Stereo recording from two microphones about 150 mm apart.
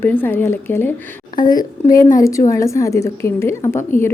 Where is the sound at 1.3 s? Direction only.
65° left (ahead or behind).